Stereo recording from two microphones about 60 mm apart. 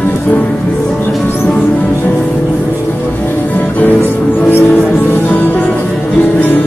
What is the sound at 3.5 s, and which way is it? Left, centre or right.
Music, left.